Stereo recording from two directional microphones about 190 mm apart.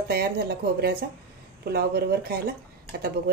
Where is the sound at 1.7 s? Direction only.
55° right (ahead or behind).